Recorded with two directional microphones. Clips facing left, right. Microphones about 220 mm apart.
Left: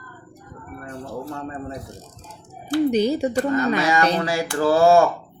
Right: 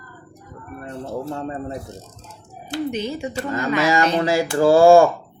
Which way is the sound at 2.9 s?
35° left (ahead or behind).